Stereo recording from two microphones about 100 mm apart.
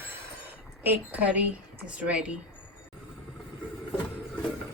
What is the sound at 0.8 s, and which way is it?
Speech, 15° right (ahead or behind).